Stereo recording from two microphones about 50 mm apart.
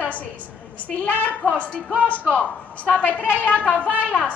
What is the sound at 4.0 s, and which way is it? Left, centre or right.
Speech, left.